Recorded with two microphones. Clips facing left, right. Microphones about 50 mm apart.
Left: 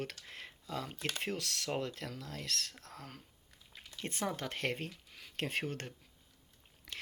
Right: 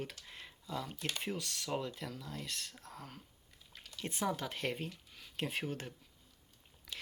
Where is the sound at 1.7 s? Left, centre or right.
Left.